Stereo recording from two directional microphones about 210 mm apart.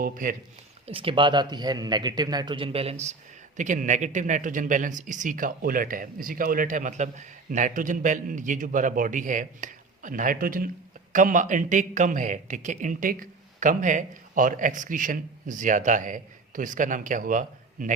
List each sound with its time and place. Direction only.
0.0 s speech: 40° right (ahead or behind)
0.9 s speech: 25° right (ahead or behind)